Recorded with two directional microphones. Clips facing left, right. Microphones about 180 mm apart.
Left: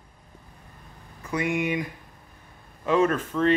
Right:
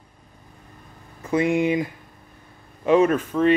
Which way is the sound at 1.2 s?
25° right (ahead or behind).